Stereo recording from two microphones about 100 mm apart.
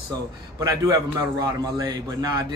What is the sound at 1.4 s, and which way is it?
A man's voice, 40° right (ahead or behind).